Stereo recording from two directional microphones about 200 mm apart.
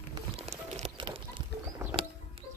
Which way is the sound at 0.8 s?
25° right (ahead or behind).